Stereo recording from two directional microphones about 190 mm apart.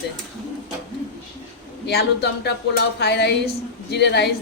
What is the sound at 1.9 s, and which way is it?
A woman's voice, 60° left (ahead or behind).